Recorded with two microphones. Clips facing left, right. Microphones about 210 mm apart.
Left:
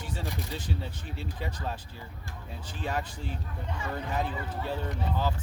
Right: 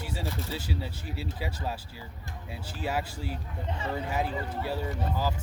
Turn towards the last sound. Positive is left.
turn(degrees=-10)  # may be behind; listen again after turning